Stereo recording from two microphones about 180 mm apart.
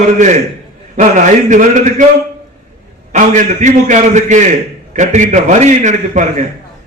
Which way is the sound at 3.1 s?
45° right (ahead or behind).